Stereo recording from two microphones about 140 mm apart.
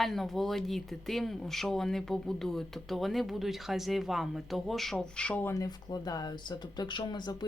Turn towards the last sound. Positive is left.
turn(degrees=30)  # may be behind; listen again after turning